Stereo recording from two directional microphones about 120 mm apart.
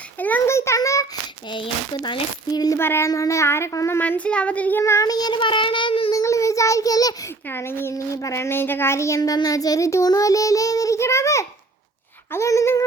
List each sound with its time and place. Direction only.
0.2 s a sound: 15° left (ahead or behind)
1.5 s speech: 45° left (ahead or behind)
2.7 s a child's voice: 20° left (ahead or behind)
4.8 s child singing: 25° left (ahead or behind); by 6.1 s 45° left (ahead or behind)
6.1 s child singing: 25° left (ahead or behind)
7.4 s a child's voice: 20° left (ahead or behind)